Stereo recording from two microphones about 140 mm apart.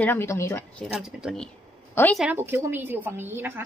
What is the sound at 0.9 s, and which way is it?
Speech, 5° right (ahead or behind).